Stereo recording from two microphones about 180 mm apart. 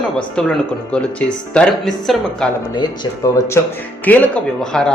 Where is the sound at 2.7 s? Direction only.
25° left (ahead or behind).